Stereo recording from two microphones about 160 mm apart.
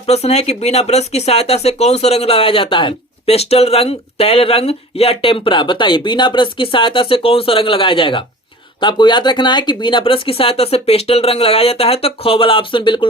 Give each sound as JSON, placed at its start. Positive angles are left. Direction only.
{"t": 0.0, "sound": "speech", "side_deg": 40}